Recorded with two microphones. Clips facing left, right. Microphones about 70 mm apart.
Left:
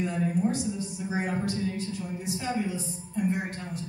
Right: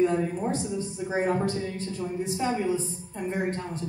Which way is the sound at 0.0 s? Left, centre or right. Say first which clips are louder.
Right 3 dB; right.